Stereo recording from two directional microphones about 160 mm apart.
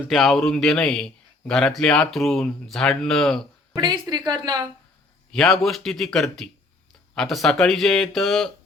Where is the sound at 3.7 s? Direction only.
25° right (ahead or behind).